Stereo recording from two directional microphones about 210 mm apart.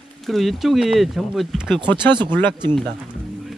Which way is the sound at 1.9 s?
20° right (ahead or behind).